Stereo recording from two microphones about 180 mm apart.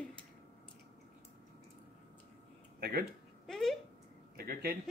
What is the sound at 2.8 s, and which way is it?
Speech, 60° right (ahead or behind).